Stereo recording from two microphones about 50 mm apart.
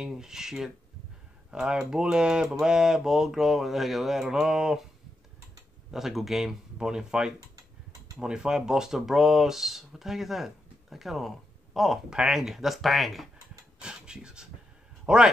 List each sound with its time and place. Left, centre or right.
0.0 s speech: centre
4.2 s speech: centre
5.9 s speech: centre
6.8 s speech: centre
12.1 s speech: centre
13.7 s a man's voice: centre